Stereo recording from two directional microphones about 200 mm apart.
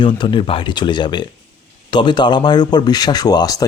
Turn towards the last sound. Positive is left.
turn(degrees=20)  # may be behind; listen again after turning